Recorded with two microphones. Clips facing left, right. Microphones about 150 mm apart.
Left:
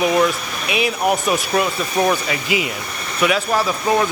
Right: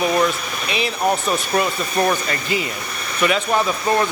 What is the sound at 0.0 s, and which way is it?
A man's voice, 5° left (ahead or behind).